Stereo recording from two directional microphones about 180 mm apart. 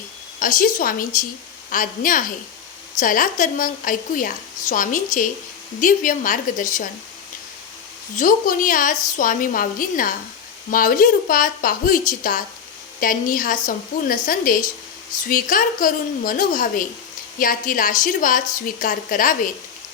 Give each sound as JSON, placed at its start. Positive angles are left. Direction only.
{"t": 0.3, "sound": "a woman's voice", "side_deg": 50}
{"t": 8.1, "sound": "a woman's voice", "side_deg": 50}